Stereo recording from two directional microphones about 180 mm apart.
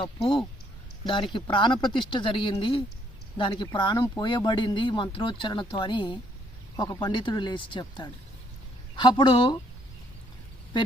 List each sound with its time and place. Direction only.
0.0 s speech: 25° left (ahead or behind)